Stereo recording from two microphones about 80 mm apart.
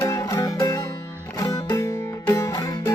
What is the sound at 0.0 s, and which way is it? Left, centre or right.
Music, left.